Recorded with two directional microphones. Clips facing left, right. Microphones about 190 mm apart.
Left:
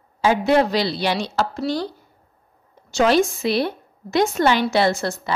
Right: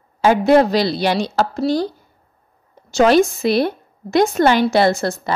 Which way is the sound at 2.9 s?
45° right (ahead or behind).